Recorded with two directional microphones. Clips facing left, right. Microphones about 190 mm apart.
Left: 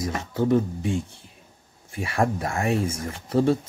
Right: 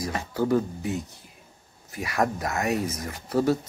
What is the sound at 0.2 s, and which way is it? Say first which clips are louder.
Speech: left 2 dB; 25° left (ahead or behind).